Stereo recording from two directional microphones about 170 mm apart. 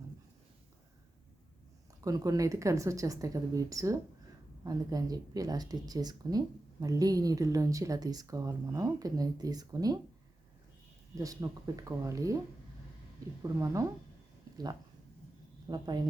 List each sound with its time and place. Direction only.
2.0 s speech: 20° right (ahead or behind)
11.2 s speech: 20° right (ahead or behind)
13.6 s speech: 20° right (ahead or behind)
15.7 s speech: 25° right (ahead or behind)